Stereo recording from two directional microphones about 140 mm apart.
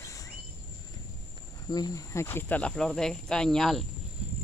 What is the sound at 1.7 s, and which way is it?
Speech, 30° left (ahead or behind).